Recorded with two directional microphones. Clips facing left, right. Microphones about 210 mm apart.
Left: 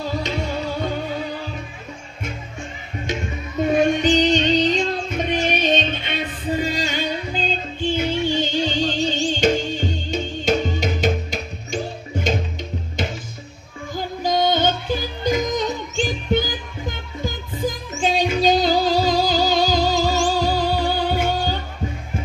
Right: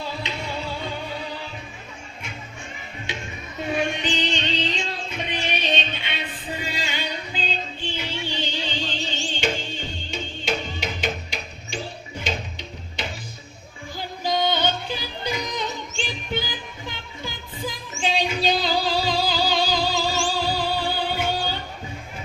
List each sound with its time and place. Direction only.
0.0 s music: 45° left (ahead or behind)
3.1 s music: 45° left (ahead or behind)
13.9 s yodeling: 45° left (ahead or behind)